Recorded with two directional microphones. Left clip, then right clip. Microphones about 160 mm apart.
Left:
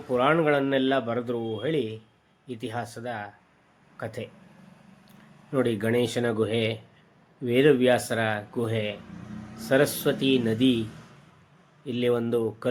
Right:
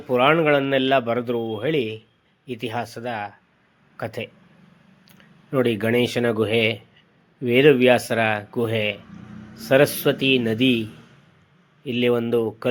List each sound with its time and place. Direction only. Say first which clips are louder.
0.1 s a man's voice: right 5 dB; 30° right (ahead or behind)
11.9 s a man's voice: right 5 dB; 30° right (ahead or behind)